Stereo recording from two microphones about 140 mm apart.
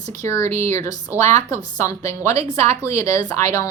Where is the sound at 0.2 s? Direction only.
20° left (ahead or behind).